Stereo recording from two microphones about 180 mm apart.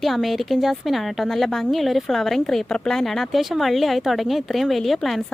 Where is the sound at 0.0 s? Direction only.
Centre (ahead or behind).